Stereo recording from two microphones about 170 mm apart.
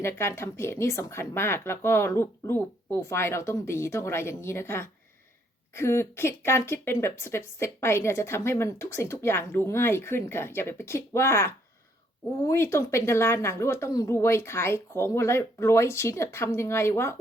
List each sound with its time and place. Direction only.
0.0 s speech: 15° left (ahead or behind)